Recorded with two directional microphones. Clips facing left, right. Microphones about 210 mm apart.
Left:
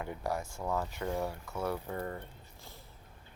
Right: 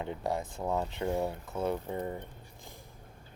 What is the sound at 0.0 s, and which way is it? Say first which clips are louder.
Speech: right 2 dB; 20° right (ahead or behind).